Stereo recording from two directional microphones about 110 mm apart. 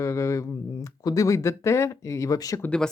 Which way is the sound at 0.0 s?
25° left (ahead or behind).